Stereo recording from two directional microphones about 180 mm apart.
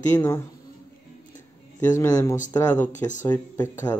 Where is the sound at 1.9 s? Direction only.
20° left (ahead or behind).